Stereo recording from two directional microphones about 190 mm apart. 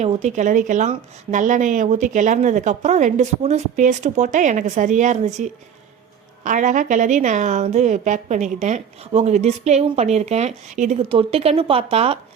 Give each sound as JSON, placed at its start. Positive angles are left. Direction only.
{"t": 0.0, "sound": "a woman's voice", "side_deg": -35}